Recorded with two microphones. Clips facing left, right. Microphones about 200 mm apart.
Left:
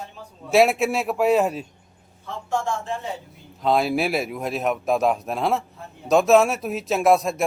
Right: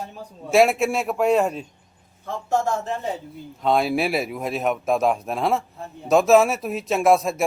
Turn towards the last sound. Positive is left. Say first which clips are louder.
# even
turn(degrees=0)  # may be behind; listen again after turning